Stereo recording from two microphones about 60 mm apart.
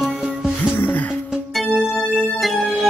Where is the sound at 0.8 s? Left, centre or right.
Left.